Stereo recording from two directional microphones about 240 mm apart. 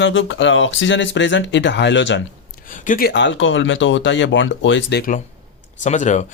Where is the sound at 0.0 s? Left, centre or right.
Left.